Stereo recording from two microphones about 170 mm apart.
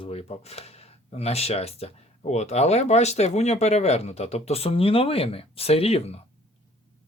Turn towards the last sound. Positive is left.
turn(degrees=35)  # may be behind; listen again after turning